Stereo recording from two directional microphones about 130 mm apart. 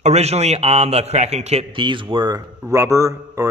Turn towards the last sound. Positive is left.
turn(degrees=-25)  # may be behind; listen again after turning